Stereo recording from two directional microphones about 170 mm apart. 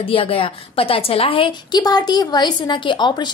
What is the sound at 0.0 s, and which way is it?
A woman's voice, 35° left (ahead or behind).